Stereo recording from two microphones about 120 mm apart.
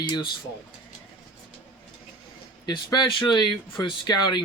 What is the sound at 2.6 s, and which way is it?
Speech, 40° left (ahead or behind).